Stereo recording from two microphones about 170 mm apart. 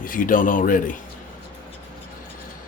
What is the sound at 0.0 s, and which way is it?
Speech, 55° left (ahead or behind).